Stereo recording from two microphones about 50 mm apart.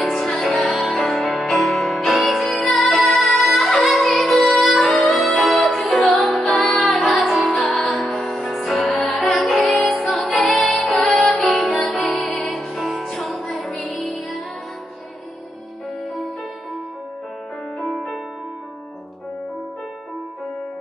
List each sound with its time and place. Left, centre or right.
0.0 s music: centre
9.8 s music: left
10.0 s music: centre
11.5 s music: centre
17.7 s music: centre